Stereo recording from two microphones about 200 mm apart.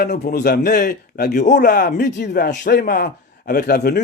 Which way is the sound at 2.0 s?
60° left (ahead or behind).